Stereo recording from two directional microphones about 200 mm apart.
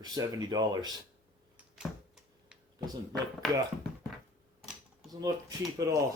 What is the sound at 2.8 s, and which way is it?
Speech, 20° right (ahead or behind).